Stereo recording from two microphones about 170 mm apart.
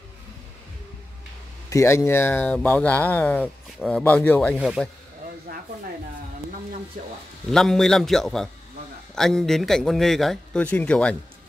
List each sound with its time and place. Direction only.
1.7 s speech: 15° left (ahead or behind)
5.5 s snake: 70° right (ahead or behind)
7.5 s a man's voice: 5° left (ahead or behind)